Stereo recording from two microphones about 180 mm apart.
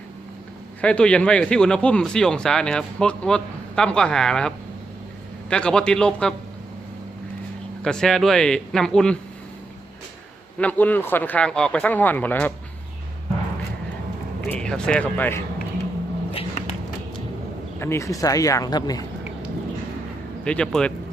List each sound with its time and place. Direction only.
0.8 s speech: 5° left (ahead or behind)
7.8 s speech: 5° left (ahead or behind)
10.6 s speech: 10° left (ahead or behind)
14.4 s speech: 5° left (ahead or behind)
16.3 s a sound: 30° left (ahead or behind)
17.7 s speech: 15° left (ahead or behind)
20.4 s speech: 5° left (ahead or behind)